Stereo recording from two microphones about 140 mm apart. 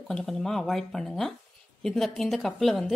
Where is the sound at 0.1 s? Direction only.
5° left (ahead or behind).